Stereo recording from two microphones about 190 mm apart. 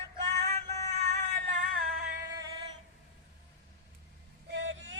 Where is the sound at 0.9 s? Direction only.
35° right (ahead or behind).